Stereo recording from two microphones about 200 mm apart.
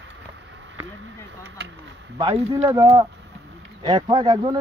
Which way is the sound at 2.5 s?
15° right (ahead or behind).